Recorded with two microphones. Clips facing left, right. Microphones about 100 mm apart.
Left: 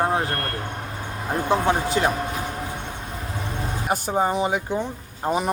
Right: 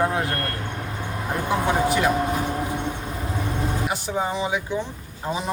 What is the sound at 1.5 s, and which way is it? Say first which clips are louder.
Speech: even; 30° left (ahead or behind).